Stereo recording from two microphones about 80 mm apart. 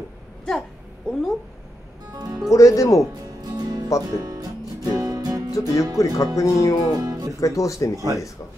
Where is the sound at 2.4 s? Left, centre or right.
Left.